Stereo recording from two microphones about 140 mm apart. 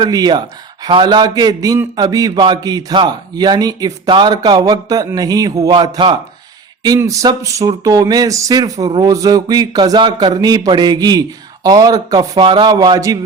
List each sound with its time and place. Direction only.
0.0 s a man's voice: 30° right (ahead or behind)